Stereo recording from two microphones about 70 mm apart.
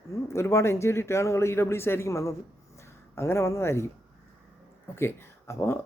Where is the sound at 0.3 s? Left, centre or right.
Left.